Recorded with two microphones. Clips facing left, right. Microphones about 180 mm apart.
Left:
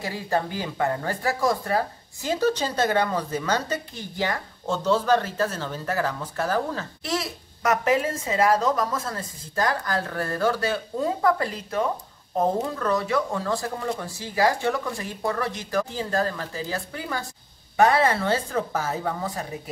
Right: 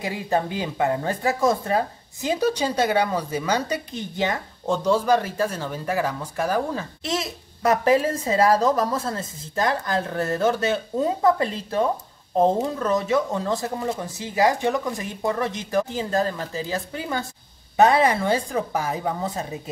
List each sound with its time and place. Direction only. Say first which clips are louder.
0.0 s speech: right 2 dB; 15° right (ahead or behind)